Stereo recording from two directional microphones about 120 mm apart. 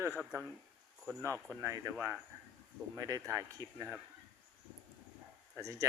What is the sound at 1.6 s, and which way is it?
Speech, 25° right (ahead or behind).